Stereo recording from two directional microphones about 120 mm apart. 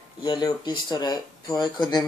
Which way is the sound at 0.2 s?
35° left (ahead or behind).